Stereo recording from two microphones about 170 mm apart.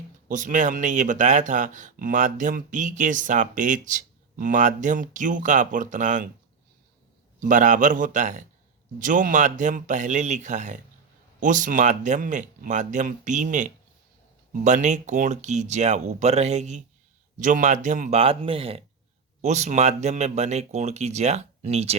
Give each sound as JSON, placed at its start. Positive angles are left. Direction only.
{"t": 0.3, "sound": "speech", "side_deg": -50}
{"t": 7.3, "sound": "speech", "side_deg": -50}